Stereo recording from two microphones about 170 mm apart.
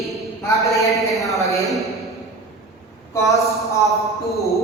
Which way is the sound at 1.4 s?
20° left (ahead or behind).